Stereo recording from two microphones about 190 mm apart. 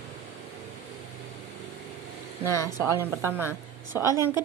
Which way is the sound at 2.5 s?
15° left (ahead or behind).